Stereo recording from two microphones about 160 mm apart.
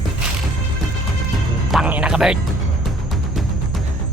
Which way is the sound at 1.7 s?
5° right (ahead or behind).